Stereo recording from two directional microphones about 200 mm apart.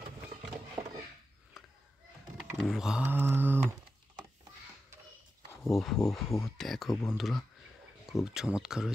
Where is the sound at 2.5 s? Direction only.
Centre (ahead or behind).